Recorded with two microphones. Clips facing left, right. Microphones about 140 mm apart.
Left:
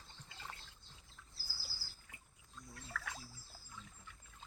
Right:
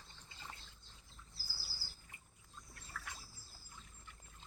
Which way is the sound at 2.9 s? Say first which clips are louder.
Left 3 dB; 90° left.